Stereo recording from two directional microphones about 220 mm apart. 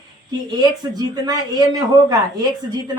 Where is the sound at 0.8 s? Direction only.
20° right (ahead or behind).